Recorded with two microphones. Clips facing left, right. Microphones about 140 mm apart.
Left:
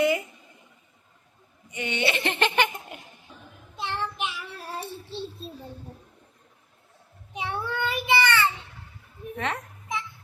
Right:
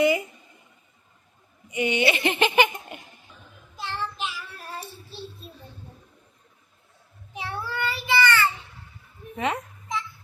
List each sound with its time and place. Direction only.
0.0 s a sound: centre (ahead or behind)
1.7 s speech: 15° right (ahead or behind)
3.8 s child singing: 20° left (ahead or behind)
7.3 s child singing: 15° left (ahead or behind)